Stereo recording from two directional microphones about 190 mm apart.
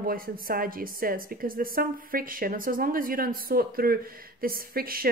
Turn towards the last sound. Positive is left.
turn(degrees=-50)  # may be behind; listen again after turning